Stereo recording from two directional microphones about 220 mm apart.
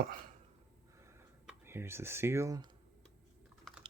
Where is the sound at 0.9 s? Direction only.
10° right (ahead or behind).